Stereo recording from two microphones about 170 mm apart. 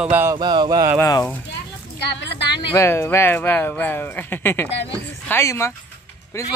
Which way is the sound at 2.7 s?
15° left (ahead or behind).